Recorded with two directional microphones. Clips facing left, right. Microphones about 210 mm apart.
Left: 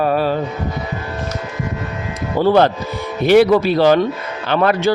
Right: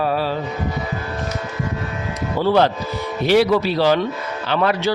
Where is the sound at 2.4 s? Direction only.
50° left (ahead or behind).